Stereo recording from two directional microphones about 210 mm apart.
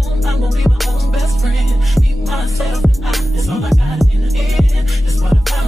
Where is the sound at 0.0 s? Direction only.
Centre (ahead or behind).